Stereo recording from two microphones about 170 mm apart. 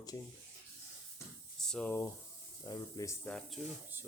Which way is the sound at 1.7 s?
10° left (ahead or behind).